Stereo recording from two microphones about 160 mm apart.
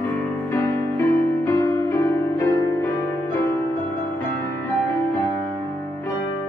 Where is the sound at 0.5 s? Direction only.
15° left (ahead or behind).